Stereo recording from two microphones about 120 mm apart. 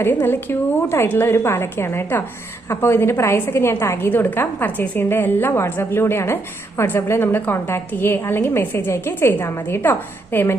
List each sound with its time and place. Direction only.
0.0 s a woman's voice: 20° left (ahead or behind)